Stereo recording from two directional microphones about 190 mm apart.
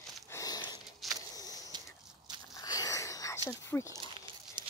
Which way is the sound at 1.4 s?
20° left (ahead or behind).